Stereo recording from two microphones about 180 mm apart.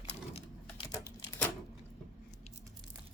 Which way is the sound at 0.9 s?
15° left (ahead or behind).